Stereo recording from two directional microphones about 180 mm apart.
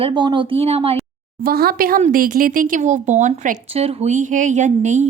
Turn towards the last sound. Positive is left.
turn(degrees=-40)  # may be behind; listen again after turning